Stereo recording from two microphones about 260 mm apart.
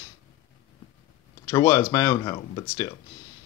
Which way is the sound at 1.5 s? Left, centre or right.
Centre.